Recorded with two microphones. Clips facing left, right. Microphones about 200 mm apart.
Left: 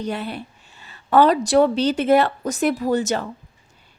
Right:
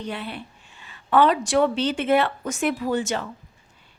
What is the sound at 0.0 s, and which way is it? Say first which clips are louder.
A woman's voice: left 5 dB; 40° left (ahead or behind).